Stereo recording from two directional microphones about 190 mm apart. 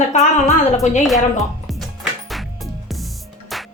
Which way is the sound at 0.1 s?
35° left (ahead or behind).